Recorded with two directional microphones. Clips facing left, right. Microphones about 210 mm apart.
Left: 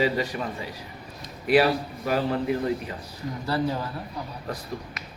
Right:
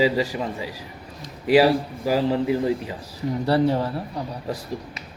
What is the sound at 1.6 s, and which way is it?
Speech, 30° right (ahead or behind).